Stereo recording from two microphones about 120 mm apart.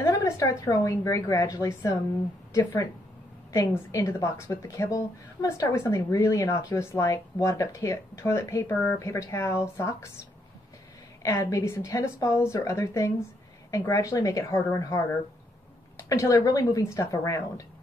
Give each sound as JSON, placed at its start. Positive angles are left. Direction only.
{"t": 0.0, "sound": "a woman's voice", "side_deg": 25}
{"t": 3.5, "sound": "a woman's voice", "side_deg": 20}
{"t": 11.2, "sound": "a woman's voice", "side_deg": 25}